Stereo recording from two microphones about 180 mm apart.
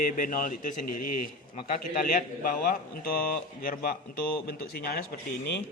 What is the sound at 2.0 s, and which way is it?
A man's voice, 50° left (ahead or behind).